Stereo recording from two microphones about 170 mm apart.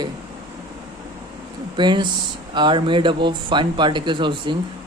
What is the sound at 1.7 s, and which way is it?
Speech, 25° right (ahead or behind).